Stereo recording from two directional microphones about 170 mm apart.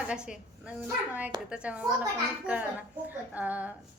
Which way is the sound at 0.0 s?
5° right (ahead or behind).